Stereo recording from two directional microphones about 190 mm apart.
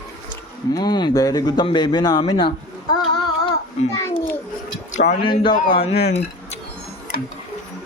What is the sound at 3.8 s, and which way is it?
Speech, 35° left (ahead or behind).